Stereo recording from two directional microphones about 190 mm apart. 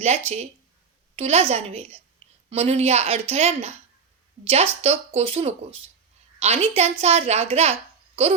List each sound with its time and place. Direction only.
0.0 s a woman's voice: 35° right (ahead or behind)